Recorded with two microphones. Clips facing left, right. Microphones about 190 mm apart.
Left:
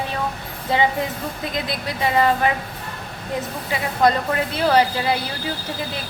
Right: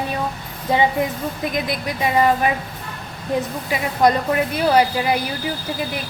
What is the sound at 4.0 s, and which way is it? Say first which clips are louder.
A woman's voice: right 2 dB; 15° right (ahead or behind).